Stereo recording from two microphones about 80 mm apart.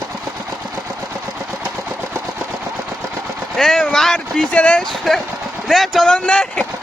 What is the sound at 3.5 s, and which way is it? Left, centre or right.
Speech, centre.